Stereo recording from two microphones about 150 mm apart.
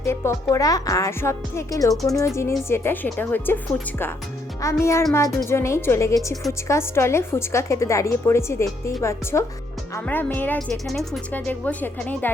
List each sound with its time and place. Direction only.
0.0 s a woman's voice: 20° left (ahead or behind)
10.8 s a woman's voice: centre (ahead or behind)